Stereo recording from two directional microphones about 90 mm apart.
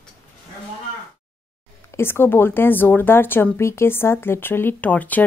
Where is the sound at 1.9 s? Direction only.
25° left (ahead or behind).